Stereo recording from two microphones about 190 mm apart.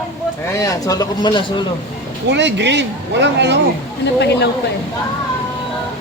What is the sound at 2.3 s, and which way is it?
Speech, 65° right (ahead or behind).